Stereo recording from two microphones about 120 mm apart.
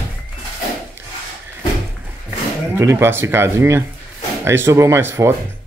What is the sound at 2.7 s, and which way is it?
Speech, 20° right (ahead or behind).